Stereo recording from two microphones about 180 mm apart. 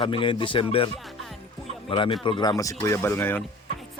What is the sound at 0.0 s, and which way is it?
Speech, 30° left (ahead or behind).